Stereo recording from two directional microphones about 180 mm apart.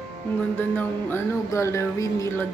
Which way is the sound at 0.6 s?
10° left (ahead or behind).